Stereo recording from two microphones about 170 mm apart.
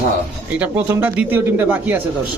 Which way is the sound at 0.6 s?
10° right (ahead or behind).